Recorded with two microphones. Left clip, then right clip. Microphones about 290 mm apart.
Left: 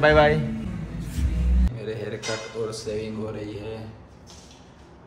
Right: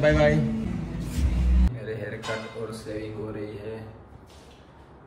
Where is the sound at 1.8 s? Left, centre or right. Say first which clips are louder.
Left 4 dB; centre.